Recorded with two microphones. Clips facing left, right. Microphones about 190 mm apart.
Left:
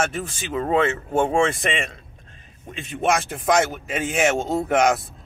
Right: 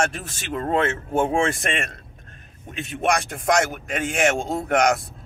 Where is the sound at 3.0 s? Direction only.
Centre (ahead or behind).